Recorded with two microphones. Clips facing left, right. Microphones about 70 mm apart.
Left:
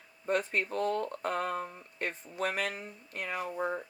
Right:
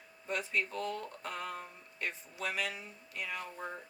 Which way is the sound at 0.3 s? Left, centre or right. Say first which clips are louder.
Left 5 dB; left.